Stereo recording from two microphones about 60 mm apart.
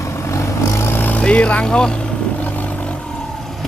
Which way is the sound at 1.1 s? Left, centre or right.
Left.